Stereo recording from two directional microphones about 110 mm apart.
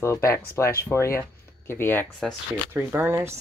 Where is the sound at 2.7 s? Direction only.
20° right (ahead or behind).